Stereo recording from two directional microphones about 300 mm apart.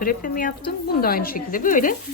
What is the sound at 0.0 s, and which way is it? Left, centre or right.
Speech, left.